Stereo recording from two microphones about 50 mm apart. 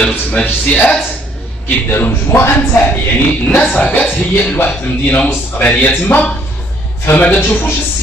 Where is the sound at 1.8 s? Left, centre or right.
Left.